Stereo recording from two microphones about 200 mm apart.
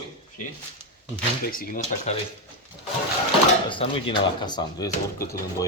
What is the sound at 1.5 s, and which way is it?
Speech, 45° left (ahead or behind).